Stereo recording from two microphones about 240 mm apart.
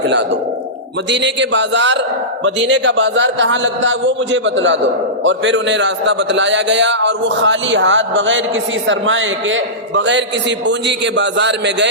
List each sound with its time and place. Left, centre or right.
1.1 s a man's voice: right